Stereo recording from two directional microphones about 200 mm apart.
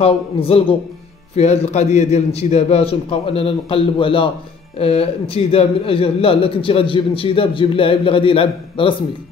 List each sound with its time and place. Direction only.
0.0 s a man's voice: 30° left (ahead or behind)